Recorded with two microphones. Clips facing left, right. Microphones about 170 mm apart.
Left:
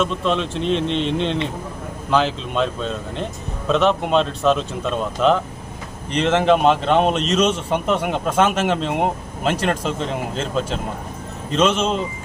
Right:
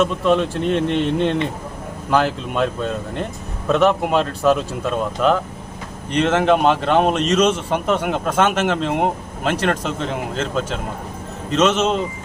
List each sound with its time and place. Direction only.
0.0 s speech: 10° right (ahead or behind)
0.7 s speech: 55° right (ahead or behind)
2.0 s speech: 5° right (ahead or behind)
3.7 s speech: 5° right (ahead or behind)
11.6 s speech: 5° right (ahead or behind)